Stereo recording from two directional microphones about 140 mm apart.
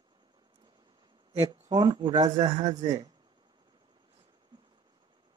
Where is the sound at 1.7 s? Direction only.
30° right (ahead or behind).